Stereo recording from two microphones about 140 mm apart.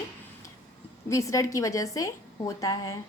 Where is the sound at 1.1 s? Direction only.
25° left (ahead or behind).